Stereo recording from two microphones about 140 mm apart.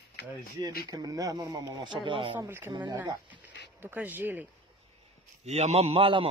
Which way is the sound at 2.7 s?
30° right (ahead or behind).